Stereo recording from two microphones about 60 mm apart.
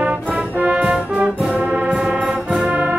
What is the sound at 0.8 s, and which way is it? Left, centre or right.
Brass instrument, centre.